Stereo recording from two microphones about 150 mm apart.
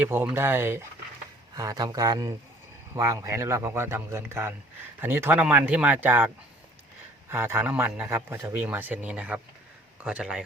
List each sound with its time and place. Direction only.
0.0 s a man's voice: 15° right (ahead or behind)